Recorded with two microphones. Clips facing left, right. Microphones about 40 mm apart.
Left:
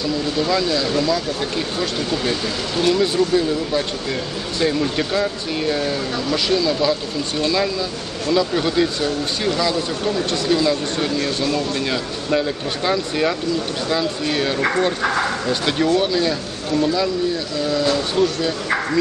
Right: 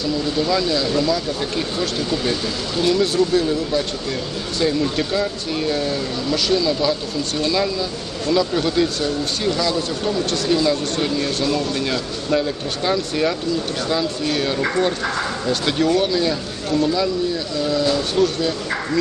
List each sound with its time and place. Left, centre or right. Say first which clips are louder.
0.4 s speech: even; centre